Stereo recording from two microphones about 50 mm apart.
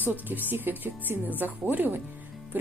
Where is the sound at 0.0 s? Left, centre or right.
Right.